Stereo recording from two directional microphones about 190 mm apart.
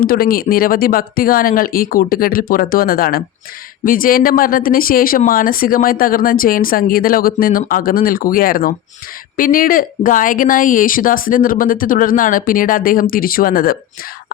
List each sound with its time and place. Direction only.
0.0 s speech: 50° left (ahead or behind)